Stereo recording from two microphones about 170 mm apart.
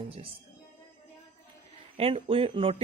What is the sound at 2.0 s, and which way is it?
Speech, 35° right (ahead or behind).